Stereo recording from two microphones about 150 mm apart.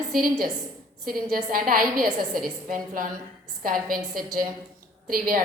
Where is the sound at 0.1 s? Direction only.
70° right (ahead or behind).